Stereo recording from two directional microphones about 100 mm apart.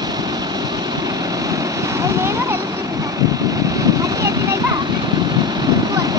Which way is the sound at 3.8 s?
35° right (ahead or behind).